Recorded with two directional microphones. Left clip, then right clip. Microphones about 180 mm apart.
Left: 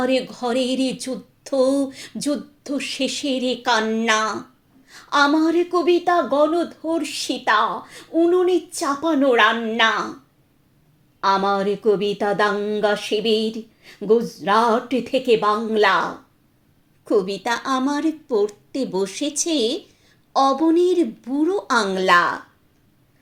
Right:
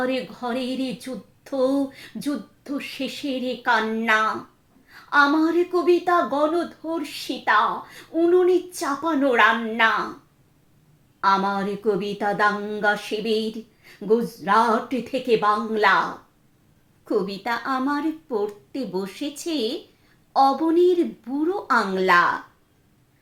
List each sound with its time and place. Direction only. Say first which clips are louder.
0.0 s a woman's voice: left 5 dB; 25° left (ahead or behind)
11.2 s a woman's voice: left 2 dB; 25° left (ahead or behind)
17.1 s a woman's voice: left 4 dB; 25° left (ahead or behind)